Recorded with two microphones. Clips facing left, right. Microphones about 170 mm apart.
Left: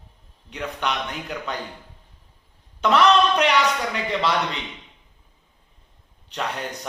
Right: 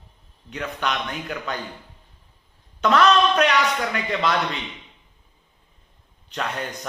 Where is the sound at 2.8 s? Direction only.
20° left (ahead or behind).